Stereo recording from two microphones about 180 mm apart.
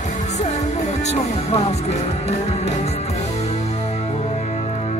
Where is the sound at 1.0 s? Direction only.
35° left (ahead or behind).